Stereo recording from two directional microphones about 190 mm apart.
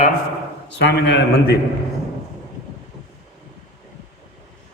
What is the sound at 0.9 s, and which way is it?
Speech, 65° left (ahead or behind).